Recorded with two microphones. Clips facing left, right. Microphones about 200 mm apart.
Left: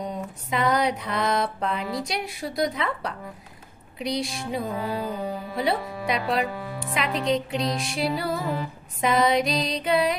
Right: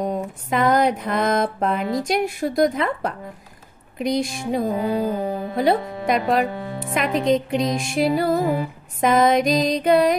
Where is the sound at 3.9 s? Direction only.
50° right (ahead or behind).